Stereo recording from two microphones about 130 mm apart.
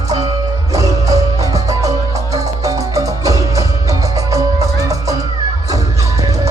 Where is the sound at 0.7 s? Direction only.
25° right (ahead or behind).